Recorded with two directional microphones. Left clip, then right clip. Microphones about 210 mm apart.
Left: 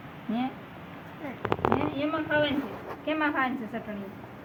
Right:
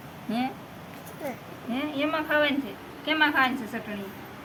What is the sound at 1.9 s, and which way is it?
A woman's voice, centre (ahead or behind).